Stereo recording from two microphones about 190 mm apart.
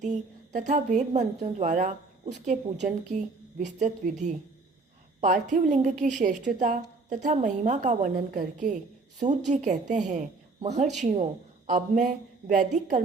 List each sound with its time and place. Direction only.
0.0 s a woman's voice: 40° right (ahead or behind)